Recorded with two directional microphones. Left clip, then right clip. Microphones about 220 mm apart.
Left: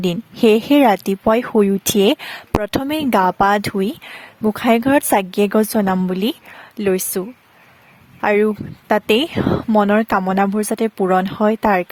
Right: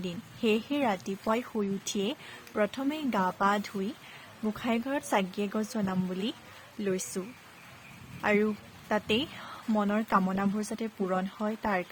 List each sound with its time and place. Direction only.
0.0 s speech: 55° left (ahead or behind)
8.2 s speech: 50° left (ahead or behind)